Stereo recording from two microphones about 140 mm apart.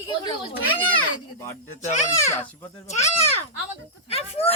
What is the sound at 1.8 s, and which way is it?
Speech, 60° left (ahead or behind).